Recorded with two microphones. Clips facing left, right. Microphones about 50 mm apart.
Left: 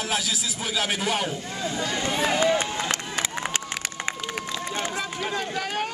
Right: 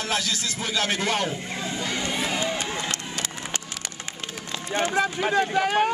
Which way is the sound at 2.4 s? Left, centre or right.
Left.